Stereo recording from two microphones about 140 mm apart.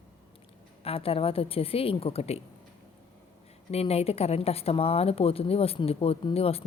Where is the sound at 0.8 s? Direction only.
45° left (ahead or behind).